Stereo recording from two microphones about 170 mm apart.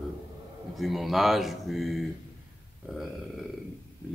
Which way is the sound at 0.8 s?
Centre (ahead or behind).